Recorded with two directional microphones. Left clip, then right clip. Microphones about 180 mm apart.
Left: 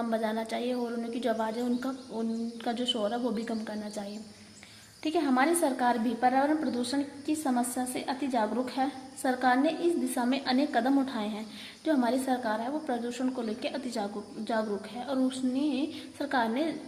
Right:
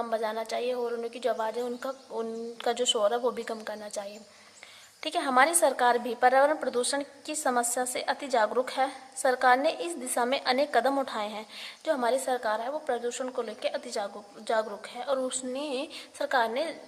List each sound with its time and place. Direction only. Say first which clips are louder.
0.0 s a woman's voice: right 1 dB; 30° right (ahead or behind)